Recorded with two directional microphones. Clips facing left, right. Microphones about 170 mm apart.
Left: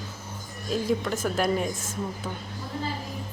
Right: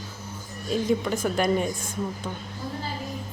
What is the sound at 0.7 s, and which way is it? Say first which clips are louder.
A woman's voice: right 2 dB; centre (ahead or behind).